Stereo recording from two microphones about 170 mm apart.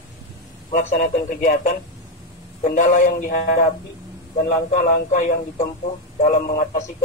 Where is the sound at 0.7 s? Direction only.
45° left (ahead or behind).